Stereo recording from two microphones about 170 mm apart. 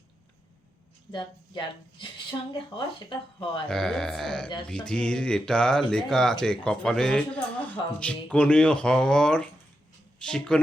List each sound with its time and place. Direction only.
1.1 s speech: 30° left (ahead or behind)
3.7 s speech: 5° left (ahead or behind)